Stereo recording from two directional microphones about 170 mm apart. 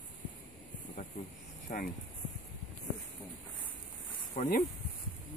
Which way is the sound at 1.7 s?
50° left (ahead or behind).